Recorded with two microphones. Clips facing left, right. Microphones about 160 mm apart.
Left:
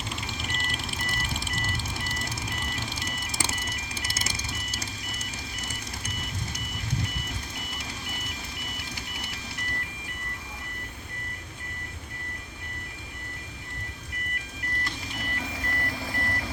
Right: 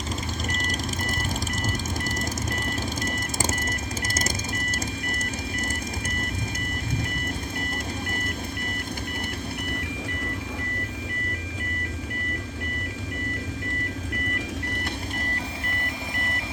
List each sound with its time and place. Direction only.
0.6 s ice cream truck: 40° right (ahead or behind)
9.1 s music: 50° right (ahead or behind)